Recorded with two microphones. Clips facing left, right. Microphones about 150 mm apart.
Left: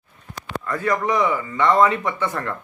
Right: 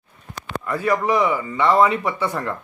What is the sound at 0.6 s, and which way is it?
A man's voice, 10° right (ahead or behind).